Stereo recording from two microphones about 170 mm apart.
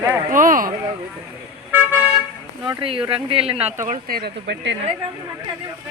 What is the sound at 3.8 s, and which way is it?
Speech, 65° right (ahead or behind).